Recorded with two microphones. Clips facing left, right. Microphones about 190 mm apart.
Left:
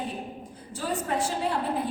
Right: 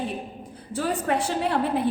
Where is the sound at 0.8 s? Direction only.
70° right (ahead or behind).